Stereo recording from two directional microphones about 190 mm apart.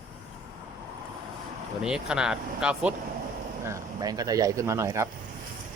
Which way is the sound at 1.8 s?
5° right (ahead or behind).